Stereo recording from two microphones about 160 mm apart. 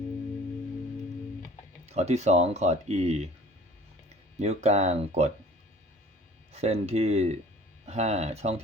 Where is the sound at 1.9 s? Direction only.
45° right (ahead or behind).